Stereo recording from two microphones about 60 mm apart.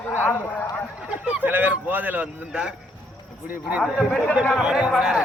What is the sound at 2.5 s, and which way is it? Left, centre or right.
Speech, centre.